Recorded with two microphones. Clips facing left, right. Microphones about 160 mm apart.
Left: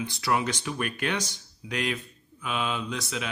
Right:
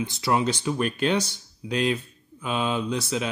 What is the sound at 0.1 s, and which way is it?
Speech, 25° right (ahead or behind).